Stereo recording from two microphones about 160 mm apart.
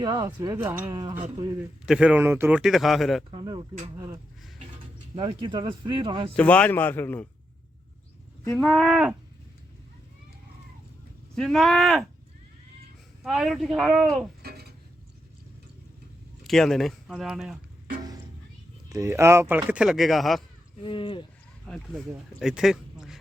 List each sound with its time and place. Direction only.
0.0 s speech: 20° right (ahead or behind); by 3.2 s centre (ahead or behind)
3.3 s speech: 25° right (ahead or behind)
5.1 s speech: 30° right (ahead or behind)
6.3 s a man's voice: 10° left (ahead or behind)
8.5 s speech: centre (ahead or behind)
11.3 s speech: centre (ahead or behind)
13.2 s speech: centre (ahead or behind)
14.4 s dishes: 80° right
16.4 s speech: centre (ahead or behind)
18.9 s speech: 20° right (ahead or behind); by 20.4 s centre (ahead or behind)
20.8 s speech: 30° left (ahead or behind)
21.7 s speech: centre (ahead or behind)